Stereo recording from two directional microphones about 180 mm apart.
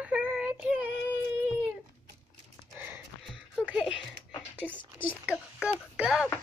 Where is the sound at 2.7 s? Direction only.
15° right (ahead or behind).